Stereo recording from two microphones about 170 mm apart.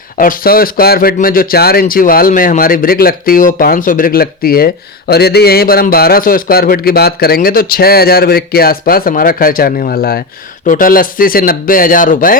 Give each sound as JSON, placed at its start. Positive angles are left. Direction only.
{"t": 0.2, "sound": "speech", "side_deg": 55}